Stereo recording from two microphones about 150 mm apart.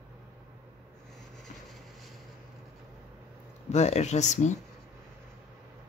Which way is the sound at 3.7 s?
50° left (ahead or behind).